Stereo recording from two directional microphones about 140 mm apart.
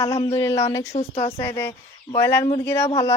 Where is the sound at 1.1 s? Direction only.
40° left (ahead or behind).